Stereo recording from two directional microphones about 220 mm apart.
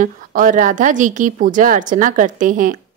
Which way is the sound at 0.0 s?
35° right (ahead or behind).